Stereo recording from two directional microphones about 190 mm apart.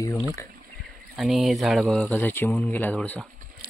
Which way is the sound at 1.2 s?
Centre (ahead or behind).